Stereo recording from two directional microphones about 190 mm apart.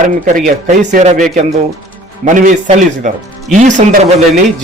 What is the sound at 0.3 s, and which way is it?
Speech, 45° right (ahead or behind).